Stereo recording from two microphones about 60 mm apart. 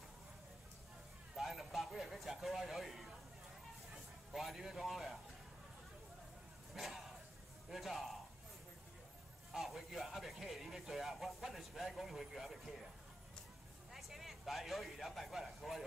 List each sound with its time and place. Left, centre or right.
1.3 s a sound: centre
4.3 s speech: centre
6.7 s speech: centre
9.5 s speech: centre
13.9 s speech: centre